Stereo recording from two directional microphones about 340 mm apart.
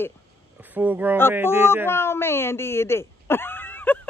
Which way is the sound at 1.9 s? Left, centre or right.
Centre.